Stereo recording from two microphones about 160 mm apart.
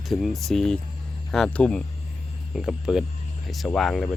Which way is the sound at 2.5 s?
5° right (ahead or behind).